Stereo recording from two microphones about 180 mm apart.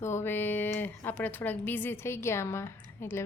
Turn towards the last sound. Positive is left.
turn(degrees=15)  # may be behind; listen again after turning